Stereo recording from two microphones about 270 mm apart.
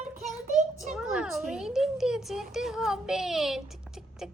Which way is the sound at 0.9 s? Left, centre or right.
Centre.